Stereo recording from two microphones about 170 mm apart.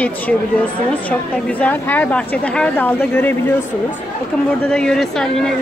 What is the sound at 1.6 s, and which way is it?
A woman's voice, 10° left (ahead or behind).